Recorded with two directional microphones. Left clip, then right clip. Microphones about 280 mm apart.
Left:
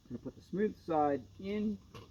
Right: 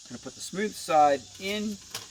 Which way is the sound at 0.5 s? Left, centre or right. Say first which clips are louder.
Right 9 dB; right.